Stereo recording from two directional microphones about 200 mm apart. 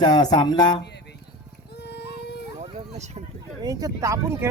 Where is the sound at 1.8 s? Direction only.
55° left (ahead or behind).